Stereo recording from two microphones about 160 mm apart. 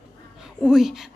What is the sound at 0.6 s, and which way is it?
Speech, 5° right (ahead or behind).